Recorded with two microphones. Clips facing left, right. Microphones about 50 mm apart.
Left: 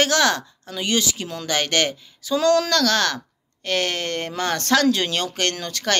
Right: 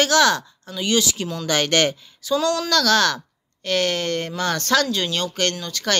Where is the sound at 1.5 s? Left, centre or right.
Centre.